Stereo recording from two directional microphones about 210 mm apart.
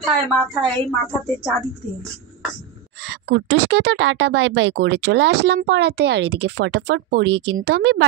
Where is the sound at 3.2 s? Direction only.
55° right (ahead or behind).